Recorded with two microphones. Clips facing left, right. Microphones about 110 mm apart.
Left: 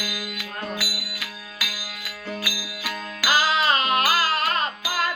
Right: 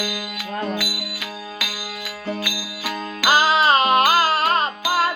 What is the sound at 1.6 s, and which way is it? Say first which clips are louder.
Music: right 5 dB; 30° right (ahead or behind).